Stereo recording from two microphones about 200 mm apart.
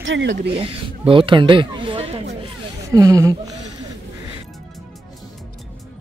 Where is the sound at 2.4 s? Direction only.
15° right (ahead or behind).